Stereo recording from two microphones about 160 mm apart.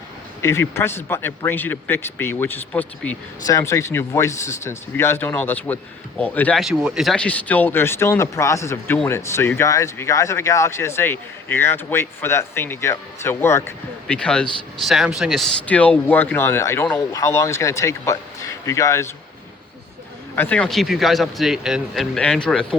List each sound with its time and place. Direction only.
0.4 s speech: 15° left (ahead or behind)
6.6 s speech: 5° right (ahead or behind); by 19.0 s 20° left (ahead or behind)
20.3 s speech: 10° left (ahead or behind)